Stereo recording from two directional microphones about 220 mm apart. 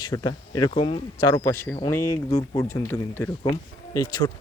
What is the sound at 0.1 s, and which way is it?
Speech, 20° left (ahead or behind).